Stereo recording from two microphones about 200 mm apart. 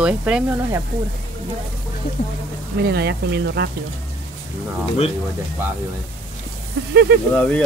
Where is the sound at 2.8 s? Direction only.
55° right (ahead or behind).